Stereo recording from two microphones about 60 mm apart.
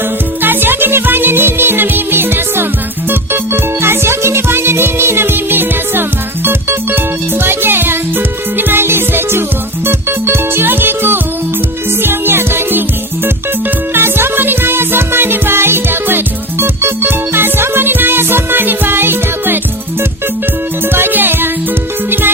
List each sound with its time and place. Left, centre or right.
0.4 s music: right
13.9 s music: right
20.9 s music: right